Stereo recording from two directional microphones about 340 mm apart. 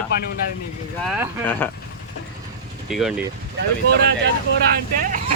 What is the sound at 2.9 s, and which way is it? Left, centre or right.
Speech, centre.